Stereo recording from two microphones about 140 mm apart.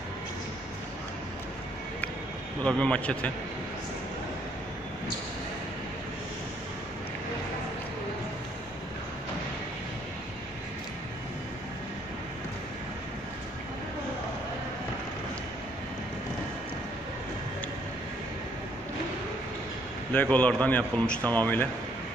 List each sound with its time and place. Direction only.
2.6 s speech: 10° left (ahead or behind)
20.1 s speech: 10° left (ahead or behind)